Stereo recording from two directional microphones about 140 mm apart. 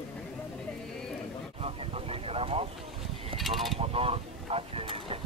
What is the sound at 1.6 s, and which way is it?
Vehicle, 45° right (ahead or behind).